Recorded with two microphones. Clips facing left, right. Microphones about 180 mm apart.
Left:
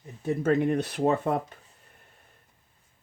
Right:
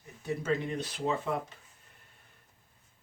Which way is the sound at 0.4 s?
55° left (ahead or behind).